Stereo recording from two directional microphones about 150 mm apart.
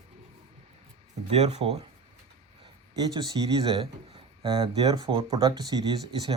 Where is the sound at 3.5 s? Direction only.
40° right (ahead or behind).